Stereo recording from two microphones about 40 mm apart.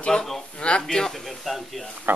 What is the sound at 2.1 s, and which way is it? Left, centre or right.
Speech, right.